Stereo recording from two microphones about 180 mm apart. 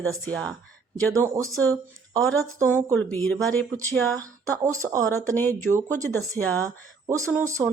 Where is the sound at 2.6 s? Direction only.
10° left (ahead or behind).